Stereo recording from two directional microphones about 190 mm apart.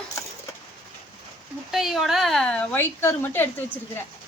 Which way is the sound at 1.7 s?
Centre (ahead or behind).